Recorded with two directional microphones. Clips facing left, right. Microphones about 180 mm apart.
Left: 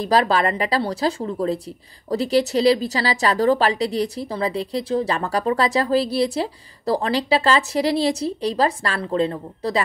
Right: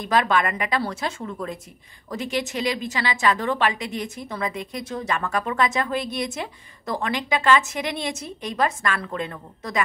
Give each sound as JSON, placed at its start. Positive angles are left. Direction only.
{"t": 0.0, "sound": "a woman's voice", "side_deg": 35}